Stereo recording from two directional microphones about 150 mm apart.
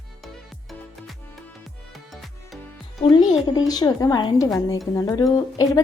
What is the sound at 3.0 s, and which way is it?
A woman's voice, 30° left (ahead or behind).